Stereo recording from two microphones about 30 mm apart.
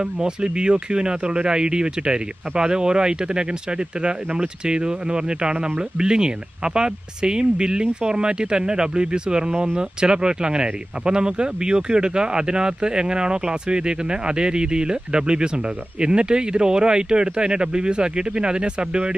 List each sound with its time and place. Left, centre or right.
0.0 s speech: right